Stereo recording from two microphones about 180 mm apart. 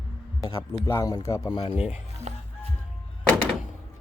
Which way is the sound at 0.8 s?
15° left (ahead or behind).